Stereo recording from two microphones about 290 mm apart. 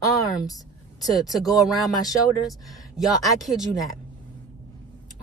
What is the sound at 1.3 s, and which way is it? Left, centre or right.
A woman's voice, centre.